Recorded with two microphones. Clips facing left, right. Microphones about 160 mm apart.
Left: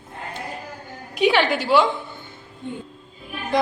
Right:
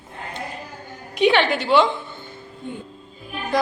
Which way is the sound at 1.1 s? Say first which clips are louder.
Right 1 dB; 5° left (ahead or behind).